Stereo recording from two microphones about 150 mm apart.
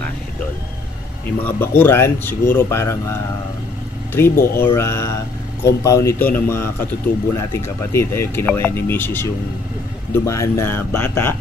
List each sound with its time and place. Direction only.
1.4 s speech: 15° left (ahead or behind)